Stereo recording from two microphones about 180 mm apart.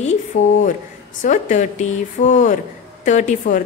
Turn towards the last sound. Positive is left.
turn(degrees=45)  # may be behind; listen again after turning